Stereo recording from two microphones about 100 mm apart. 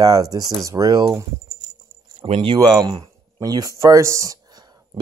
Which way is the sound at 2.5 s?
45° right (ahead or behind).